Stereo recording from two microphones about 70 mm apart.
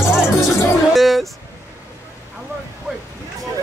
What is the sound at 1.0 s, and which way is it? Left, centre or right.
Speech, centre.